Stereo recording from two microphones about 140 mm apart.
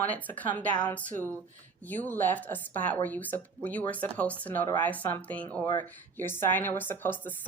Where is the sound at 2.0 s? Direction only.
15° left (ahead or behind).